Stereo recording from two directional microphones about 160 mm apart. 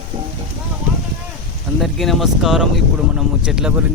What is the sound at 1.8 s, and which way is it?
Speech, centre (ahead or behind).